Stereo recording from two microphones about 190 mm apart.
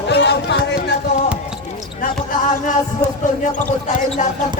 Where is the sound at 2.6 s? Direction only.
40° left (ahead or behind).